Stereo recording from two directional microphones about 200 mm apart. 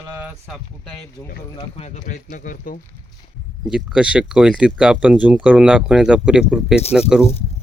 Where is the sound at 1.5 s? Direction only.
30° left (ahead or behind).